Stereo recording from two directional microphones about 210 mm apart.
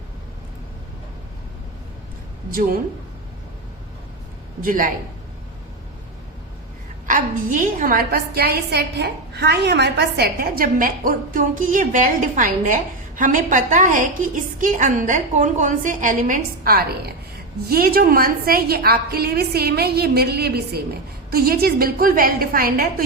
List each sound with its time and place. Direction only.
2.5 s a woman's voice: 40° right (ahead or behind)
4.6 s a woman's voice: 40° right (ahead or behind)
7.1 s a woman's voice: 40° right (ahead or behind)